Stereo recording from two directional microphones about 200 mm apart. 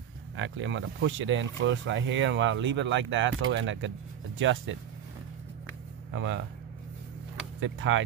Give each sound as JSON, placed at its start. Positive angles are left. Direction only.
{"t": 0.4, "sound": "speech", "side_deg": -70}
{"t": 6.1, "sound": "speech", "side_deg": -65}
{"t": 7.6, "sound": "speech", "side_deg": -70}